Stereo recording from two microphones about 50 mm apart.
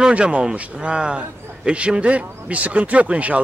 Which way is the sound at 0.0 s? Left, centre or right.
Right.